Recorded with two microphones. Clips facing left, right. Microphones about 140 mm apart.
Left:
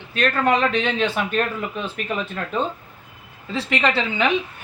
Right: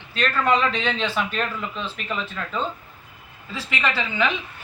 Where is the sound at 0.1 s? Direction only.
55° left (ahead or behind).